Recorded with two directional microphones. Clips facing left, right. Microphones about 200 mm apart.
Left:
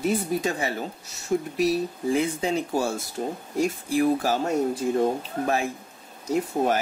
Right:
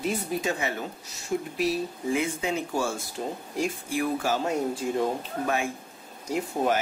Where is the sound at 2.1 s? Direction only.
35° left (ahead or behind).